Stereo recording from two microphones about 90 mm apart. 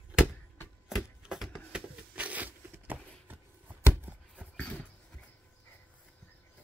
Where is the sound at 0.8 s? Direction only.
5° right (ahead or behind); by 3.9 s 20° right (ahead or behind).